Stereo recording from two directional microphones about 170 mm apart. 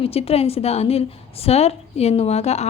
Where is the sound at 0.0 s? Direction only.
35° left (ahead or behind).